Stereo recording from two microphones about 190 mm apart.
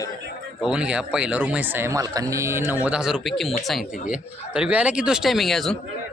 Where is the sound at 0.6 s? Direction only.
5° right (ahead or behind).